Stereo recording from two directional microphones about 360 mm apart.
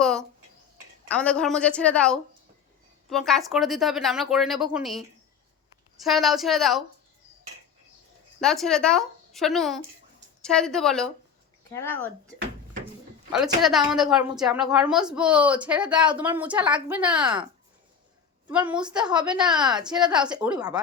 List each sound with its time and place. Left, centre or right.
0.0 s a sound: centre
1.0 s a woman's voice: centre
8.4 s a woman's voice: centre
13.3 s a woman's voice: centre
18.4 s a woman's voice: centre